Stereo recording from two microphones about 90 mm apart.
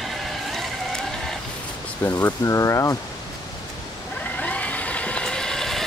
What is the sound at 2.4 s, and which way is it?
Speech, 35° left (ahead or behind).